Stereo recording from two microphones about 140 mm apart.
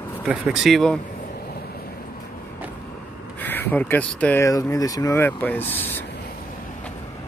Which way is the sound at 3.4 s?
15° left (ahead or behind).